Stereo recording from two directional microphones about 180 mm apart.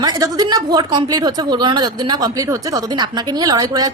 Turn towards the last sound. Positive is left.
turn(degrees=-20)  # may be behind; listen again after turning